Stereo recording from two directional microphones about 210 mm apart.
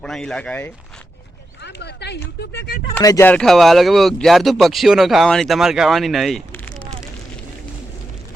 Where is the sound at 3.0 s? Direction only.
10° left (ahead or behind).